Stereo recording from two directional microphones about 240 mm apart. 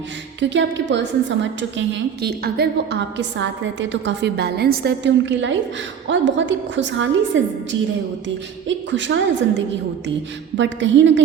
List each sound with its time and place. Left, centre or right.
0.3 s a woman's voice: right
8.6 s a woman's voice: right